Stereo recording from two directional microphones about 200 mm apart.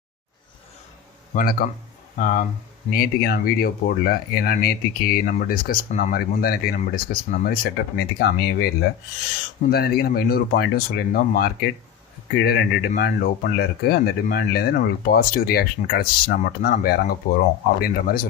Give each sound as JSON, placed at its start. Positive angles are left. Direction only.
{"t": 1.3, "sound": "speech", "side_deg": 45}
{"t": 9.7, "sound": "speech", "side_deg": 50}